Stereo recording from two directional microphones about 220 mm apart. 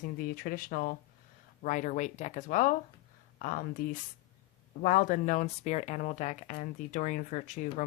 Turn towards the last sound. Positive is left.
turn(degrees=35)  # may be behind; listen again after turning